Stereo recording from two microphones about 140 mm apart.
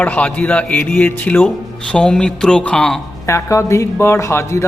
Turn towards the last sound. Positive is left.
turn(degrees=20)  # may be behind; listen again after turning